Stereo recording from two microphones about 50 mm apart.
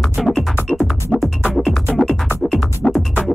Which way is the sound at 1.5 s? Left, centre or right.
Centre.